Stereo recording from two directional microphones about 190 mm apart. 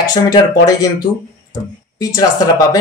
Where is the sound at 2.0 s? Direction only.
20° left (ahead or behind).